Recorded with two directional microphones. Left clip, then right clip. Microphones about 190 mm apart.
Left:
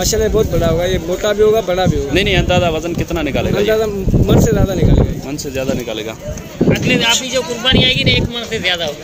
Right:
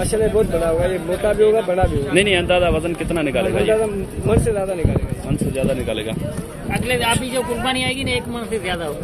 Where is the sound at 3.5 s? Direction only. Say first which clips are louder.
Left 6 dB; 45° left (ahead or behind).